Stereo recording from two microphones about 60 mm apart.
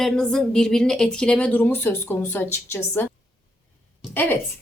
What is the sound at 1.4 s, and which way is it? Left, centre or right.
A woman's voice, left.